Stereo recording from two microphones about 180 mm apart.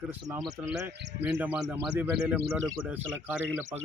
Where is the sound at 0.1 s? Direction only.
10° right (ahead or behind).